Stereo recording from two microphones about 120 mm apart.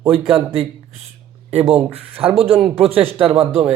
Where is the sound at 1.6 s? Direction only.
55° right (ahead or behind).